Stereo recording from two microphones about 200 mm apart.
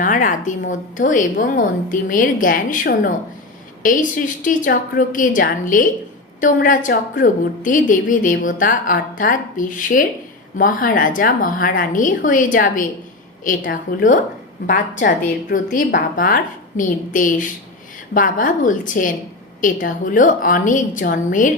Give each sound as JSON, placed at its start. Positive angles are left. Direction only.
{"t": 0.0, "sound": "a woman's voice", "side_deg": 40}